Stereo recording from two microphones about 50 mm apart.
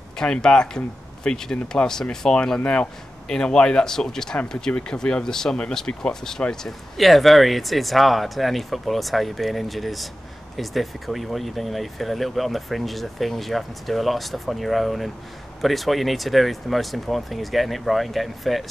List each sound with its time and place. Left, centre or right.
0.2 s speech: centre
7.0 s speech: centre